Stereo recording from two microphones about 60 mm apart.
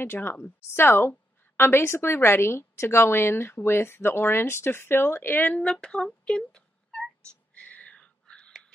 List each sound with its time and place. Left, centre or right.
0.0 s a woman's voice: left; by 7.1 s centre
7.5 s whispering: left